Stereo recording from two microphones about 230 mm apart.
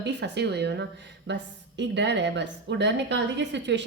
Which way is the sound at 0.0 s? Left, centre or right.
Right.